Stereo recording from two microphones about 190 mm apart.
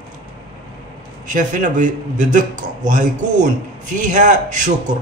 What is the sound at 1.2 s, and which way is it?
A man's voice, 45° right (ahead or behind).